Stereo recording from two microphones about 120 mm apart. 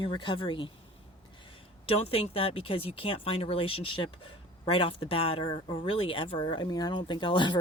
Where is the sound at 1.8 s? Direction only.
55° left (ahead or behind).